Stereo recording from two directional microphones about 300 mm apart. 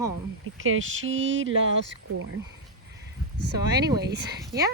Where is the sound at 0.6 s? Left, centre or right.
Right.